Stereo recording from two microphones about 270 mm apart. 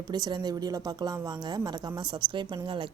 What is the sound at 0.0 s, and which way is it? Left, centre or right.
Speech, centre.